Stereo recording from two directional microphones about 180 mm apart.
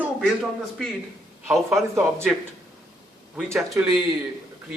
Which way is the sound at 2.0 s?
15° right (ahead or behind).